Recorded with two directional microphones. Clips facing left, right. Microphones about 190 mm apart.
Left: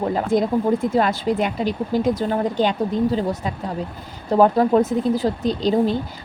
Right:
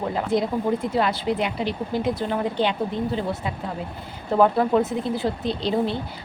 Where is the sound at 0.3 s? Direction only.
45° left (ahead or behind).